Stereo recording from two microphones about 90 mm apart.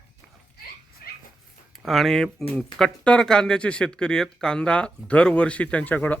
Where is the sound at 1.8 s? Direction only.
Centre (ahead or behind).